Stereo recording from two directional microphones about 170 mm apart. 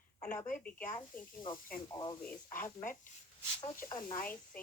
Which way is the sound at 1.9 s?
20° left (ahead or behind).